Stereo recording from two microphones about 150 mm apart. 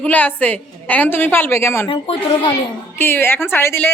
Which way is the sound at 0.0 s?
10° left (ahead or behind).